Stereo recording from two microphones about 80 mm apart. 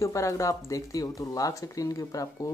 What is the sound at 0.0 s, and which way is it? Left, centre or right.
Speech, left.